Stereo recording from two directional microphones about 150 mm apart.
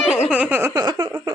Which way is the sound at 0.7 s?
25° right (ahead or behind).